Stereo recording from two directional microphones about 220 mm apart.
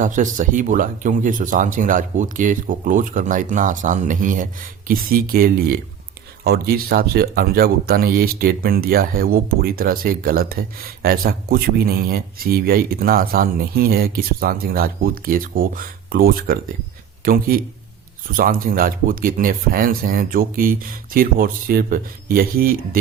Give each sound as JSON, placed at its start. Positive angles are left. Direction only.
{"t": 0.0, "sound": "speech", "side_deg": -35}